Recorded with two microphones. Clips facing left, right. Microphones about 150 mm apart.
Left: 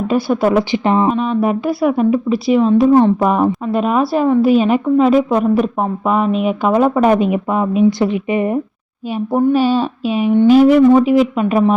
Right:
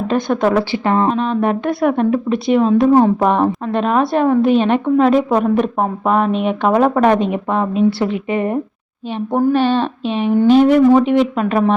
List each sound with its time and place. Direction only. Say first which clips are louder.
0.1 s speech: left 1 dB; 5° left (ahead or behind)
0.7 s speech: left 2 dB; 15° left (ahead or behind)
1.0 s a woman's voice: left 1 dB; 5° left (ahead or behind)